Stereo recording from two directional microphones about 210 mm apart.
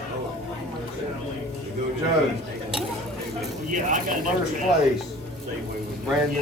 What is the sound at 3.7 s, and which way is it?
Speech, 40° right (ahead or behind).